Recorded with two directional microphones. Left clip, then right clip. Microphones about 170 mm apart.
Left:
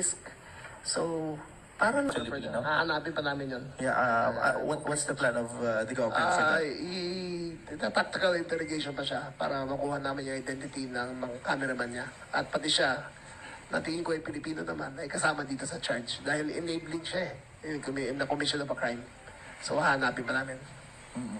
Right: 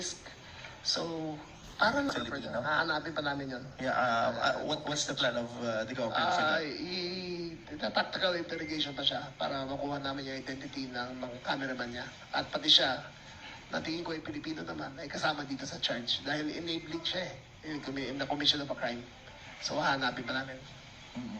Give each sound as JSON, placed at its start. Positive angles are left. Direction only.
{"t": 0.9, "sound": "a man's voice", "side_deg": 40}
{"t": 2.0, "sound": "a man's voice", "side_deg": 25}